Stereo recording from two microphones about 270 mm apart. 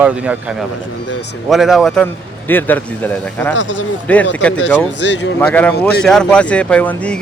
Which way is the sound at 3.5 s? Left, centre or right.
Left.